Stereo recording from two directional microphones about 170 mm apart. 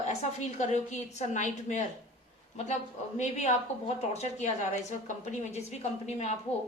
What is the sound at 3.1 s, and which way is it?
A woman's voice, 40° left (ahead or behind).